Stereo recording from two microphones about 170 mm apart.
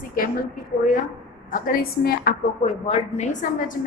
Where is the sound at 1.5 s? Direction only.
55° left (ahead or behind).